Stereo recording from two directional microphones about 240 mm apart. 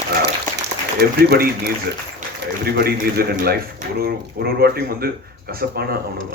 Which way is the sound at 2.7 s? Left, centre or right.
Right.